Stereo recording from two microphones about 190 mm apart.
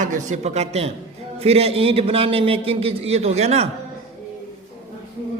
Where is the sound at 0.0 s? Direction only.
40° right (ahead or behind).